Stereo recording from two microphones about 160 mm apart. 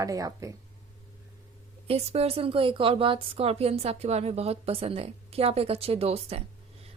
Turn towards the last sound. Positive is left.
turn(degrees=-40)  # may be behind; listen again after turning